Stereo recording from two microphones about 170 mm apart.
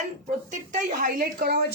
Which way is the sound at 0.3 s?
45° right (ahead or behind).